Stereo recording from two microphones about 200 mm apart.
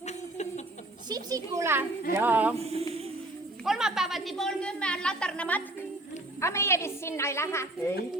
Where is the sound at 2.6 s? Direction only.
30° right (ahead or behind).